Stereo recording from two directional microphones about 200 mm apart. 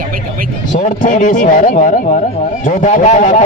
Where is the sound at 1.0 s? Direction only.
40° left (ahead or behind).